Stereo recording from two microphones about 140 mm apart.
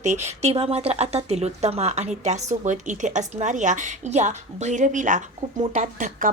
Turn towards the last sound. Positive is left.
turn(degrees=-70)  # may be behind; listen again after turning